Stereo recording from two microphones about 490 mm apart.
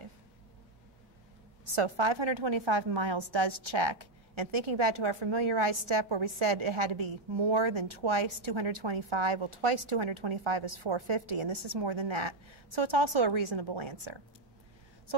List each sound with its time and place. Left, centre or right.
1.6 s a woman's voice: right